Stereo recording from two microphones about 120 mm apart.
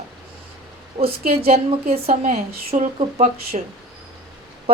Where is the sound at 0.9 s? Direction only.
55° right (ahead or behind); by 3.6 s 75° right (ahead or behind).